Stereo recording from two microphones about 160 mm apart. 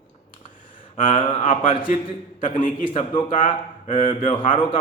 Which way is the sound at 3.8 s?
55° left (ahead or behind).